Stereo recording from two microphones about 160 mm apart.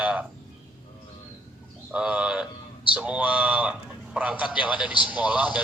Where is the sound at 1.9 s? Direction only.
10° right (ahead or behind).